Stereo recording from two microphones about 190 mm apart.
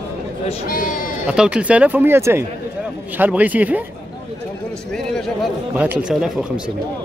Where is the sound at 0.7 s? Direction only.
45° left (ahead or behind).